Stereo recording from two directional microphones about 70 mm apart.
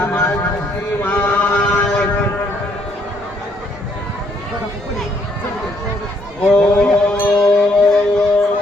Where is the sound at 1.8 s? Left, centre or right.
Centre.